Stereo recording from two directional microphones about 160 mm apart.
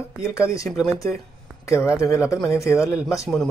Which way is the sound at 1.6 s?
15° left (ahead or behind).